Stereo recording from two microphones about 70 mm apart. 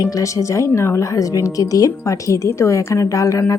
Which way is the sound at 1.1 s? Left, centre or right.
Left.